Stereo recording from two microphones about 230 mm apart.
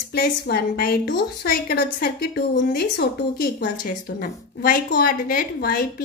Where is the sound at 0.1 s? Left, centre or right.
Left.